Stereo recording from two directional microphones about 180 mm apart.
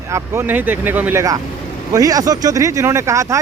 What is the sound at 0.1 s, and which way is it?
Speech, 15° right (ahead or behind).